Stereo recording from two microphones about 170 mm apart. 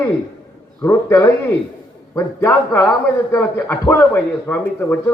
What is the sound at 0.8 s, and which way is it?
A man's voice, 10° left (ahead or behind).